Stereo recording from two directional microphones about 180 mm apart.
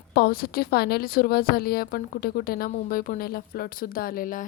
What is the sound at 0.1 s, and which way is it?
A woman's voice, 60° left (ahead or behind).